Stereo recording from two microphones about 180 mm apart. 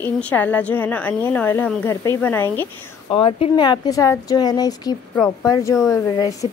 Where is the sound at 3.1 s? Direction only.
30° left (ahead or behind).